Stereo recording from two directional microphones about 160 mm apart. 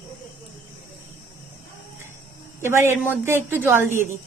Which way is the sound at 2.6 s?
15° right (ahead or behind).